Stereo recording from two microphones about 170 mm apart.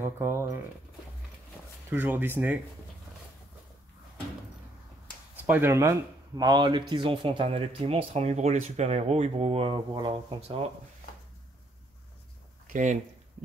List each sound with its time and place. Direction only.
0.0 s speech: 15° right (ahead or behind)
1.9 s speech: 10° right (ahead or behind)
5.3 s speech: 10° right (ahead or behind); by 10.6 s 30° right (ahead or behind)
12.6 s speech: 45° right (ahead or behind)